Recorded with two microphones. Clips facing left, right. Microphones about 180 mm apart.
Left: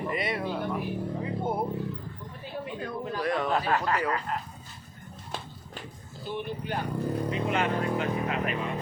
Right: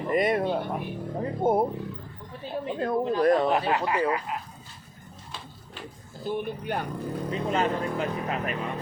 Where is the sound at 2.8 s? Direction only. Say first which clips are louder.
Right 9 dB; 45° right (ahead or behind).